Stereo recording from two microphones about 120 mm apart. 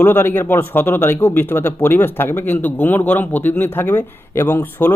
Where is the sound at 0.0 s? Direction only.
15° left (ahead or behind).